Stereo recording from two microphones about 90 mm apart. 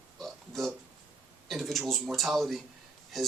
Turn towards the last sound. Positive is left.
turn(degrees=0)  # may be behind; listen again after turning